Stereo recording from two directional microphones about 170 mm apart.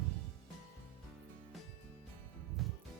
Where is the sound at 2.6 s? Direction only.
Centre (ahead or behind).